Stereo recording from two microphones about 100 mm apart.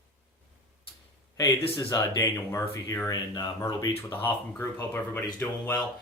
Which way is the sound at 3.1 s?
40° left (ahead or behind).